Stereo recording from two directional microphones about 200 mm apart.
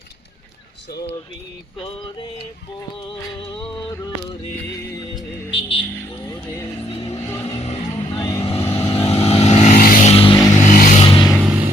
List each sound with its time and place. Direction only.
5.5 s vehicle: 25° left (ahead or behind)
6.2 s vehicle: 15° left (ahead or behind)
7.4 s music: 30° left (ahead or behind)
8.2 s vehicle: 15° left (ahead or behind)
9.0 s vehicle: 30° left (ahead or behind)
10.1 s vehicle: 30° left (ahead or behind)
10.6 s vehicle: 40° left (ahead or behind)
11.0 s vehicle: 25° left (ahead or behind)
11.3 s vehicle: 10° right (ahead or behind)